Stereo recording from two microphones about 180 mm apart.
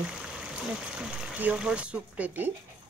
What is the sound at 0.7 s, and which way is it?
Speech, 5° right (ahead or behind).